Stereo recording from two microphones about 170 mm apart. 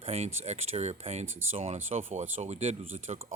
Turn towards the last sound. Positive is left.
turn(degrees=-35)  # may be behind; listen again after turning